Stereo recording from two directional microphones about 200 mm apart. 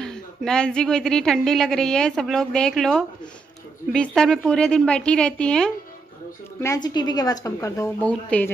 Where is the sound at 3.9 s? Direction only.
5° left (ahead or behind).